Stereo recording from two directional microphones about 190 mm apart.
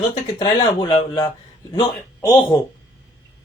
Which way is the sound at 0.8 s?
20° left (ahead or behind).